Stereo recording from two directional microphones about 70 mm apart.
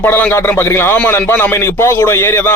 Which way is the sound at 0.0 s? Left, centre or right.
Left.